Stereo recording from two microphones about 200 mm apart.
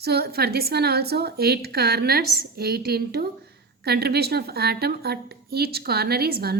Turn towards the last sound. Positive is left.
turn(degrees=-50)  # may be behind; listen again after turning